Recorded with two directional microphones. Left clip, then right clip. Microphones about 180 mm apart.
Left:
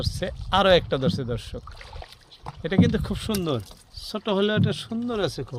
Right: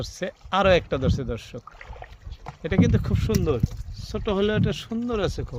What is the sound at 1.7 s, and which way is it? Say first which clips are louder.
Boat: even; 25° left (ahead or behind).